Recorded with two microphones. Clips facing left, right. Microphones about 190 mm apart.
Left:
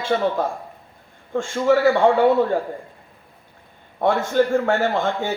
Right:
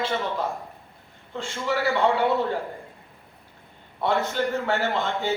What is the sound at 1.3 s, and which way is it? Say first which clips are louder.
Speech: left 9 dB; 50° left (ahead or behind).